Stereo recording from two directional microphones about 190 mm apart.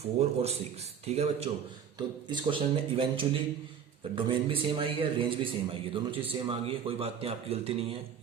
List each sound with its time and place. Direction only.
0.2 s a man's voice: 35° right (ahead or behind)